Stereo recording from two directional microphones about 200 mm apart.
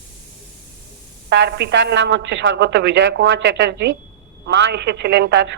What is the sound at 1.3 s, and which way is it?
A woman's voice, 60° right (ahead or behind).